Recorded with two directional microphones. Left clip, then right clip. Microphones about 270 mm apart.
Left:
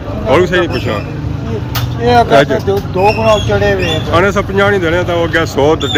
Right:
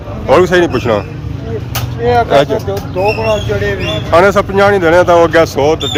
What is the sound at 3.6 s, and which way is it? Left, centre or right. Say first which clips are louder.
Speech: left 4 dB; centre.